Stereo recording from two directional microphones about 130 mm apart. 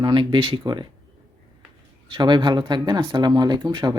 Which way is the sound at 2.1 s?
35° right (ahead or behind).